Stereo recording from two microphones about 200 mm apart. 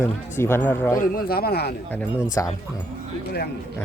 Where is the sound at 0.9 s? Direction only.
45° left (ahead or behind).